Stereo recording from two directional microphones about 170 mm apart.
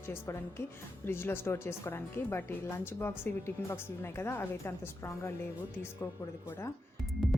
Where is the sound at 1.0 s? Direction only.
15° left (ahead or behind).